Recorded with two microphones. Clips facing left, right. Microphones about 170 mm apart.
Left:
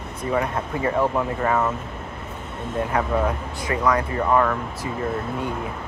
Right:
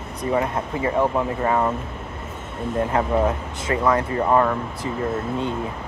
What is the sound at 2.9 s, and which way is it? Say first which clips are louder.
Speech: right 1 dB; 25° right (ahead or behind).